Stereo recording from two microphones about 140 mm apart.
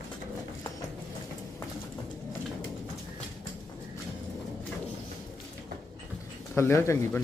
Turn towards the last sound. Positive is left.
turn(degrees=20)  # may be behind; listen again after turning